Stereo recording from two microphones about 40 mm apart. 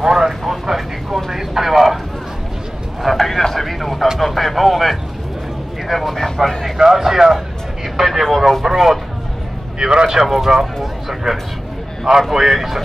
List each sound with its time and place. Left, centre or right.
0.0 s a sound: centre
0.4 s vehicle: centre
3.0 s a sound: centre
4.2 s speech: centre
6.8 s speech: centre
9.8 s speech: right
10.0 s speech: centre